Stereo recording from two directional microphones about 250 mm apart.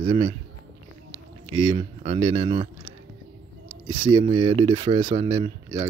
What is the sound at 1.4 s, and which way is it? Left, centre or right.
Speech, right.